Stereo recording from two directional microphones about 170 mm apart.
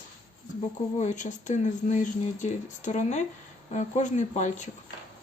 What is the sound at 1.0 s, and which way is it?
Speech, 45° left (ahead or behind).